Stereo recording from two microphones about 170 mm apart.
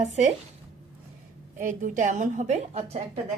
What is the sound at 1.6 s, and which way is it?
A woman's voice, 50° right (ahead or behind).